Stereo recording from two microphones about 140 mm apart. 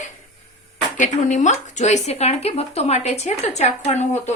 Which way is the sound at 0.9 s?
60° left (ahead or behind).